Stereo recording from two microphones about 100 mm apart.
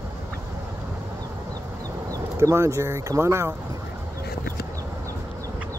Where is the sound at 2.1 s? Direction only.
35° right (ahead or behind).